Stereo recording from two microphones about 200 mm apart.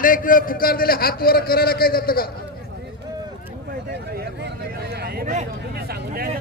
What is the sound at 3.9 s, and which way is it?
Speech, 55° right (ahead or behind).